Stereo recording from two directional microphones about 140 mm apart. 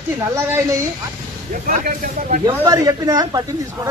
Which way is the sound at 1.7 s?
75° right (ahead or behind).